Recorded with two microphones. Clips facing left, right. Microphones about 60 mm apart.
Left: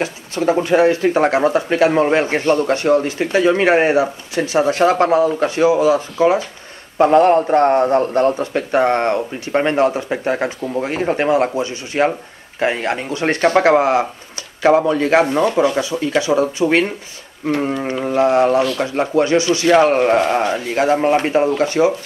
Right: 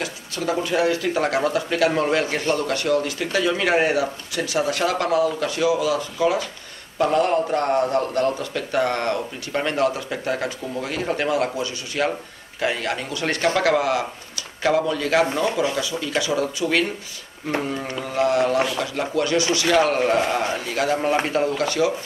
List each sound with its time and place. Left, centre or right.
0.0 s speech: left